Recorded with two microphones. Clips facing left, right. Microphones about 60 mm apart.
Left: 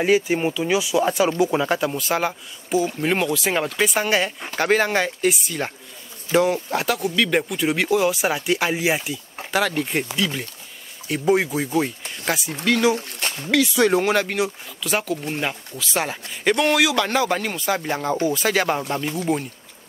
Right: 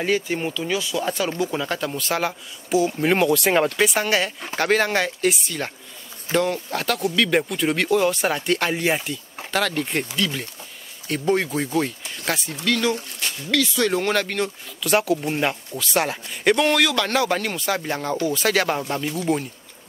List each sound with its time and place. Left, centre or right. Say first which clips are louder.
0.0 s speech: left 4 dB; centre
1.8 s speech: left 2 dB; centre
12.6 s speech: left 3 dB; centre
12.9 s speech: left 2 dB; left
13.5 s speech: left 3 dB; centre